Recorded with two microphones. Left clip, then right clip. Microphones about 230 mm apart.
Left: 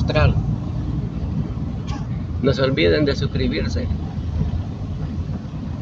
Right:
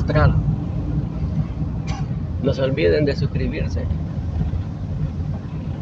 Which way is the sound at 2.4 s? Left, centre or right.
Centre.